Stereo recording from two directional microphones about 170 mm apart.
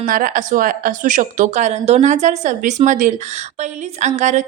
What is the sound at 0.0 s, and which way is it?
Speech, 55° right (ahead or behind).